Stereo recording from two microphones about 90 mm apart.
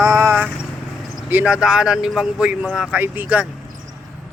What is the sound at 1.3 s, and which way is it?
Speech, 15° right (ahead or behind).